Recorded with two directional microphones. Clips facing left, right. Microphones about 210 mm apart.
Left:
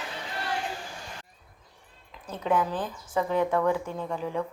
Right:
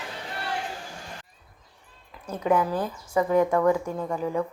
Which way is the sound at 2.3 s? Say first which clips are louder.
Right 3 dB; 10° right (ahead or behind).